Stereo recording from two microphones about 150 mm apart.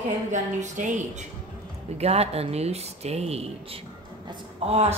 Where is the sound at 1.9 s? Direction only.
45° right (ahead or behind).